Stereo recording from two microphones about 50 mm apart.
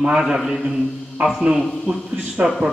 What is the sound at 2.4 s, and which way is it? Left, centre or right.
Speech, centre.